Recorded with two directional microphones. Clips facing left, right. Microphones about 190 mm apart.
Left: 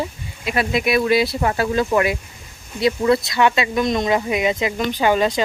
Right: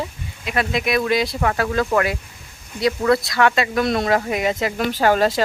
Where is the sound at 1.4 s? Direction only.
25° left (ahead or behind).